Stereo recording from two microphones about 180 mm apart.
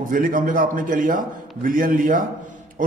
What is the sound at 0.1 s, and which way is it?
A man's voice, 50° right (ahead or behind).